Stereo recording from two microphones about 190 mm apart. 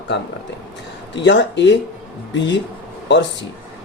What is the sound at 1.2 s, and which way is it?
Speech, 70° left (ahead or behind).